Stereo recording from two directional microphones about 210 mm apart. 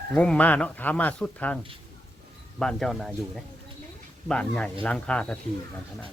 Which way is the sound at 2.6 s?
Centre (ahead or behind).